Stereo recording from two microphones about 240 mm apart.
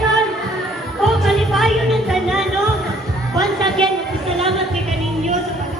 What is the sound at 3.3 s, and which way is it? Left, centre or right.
Music, centre.